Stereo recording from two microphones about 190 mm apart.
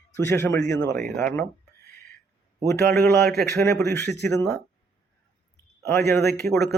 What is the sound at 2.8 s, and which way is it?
Speech, 55° right (ahead or behind).